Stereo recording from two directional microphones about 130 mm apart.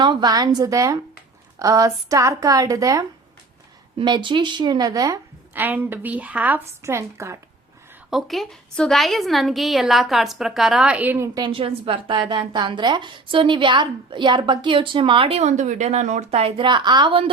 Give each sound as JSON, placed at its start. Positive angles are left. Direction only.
{"t": 0.0, "sound": "a woman's voice", "side_deg": -35}
{"t": 3.9, "sound": "a woman's voice", "side_deg": -35}
{"t": 5.5, "sound": "a woman's voice", "side_deg": -15}
{"t": 8.1, "sound": "a woman's voice", "side_deg": 0}
{"t": 11.5, "sound": "a woman's voice", "side_deg": -45}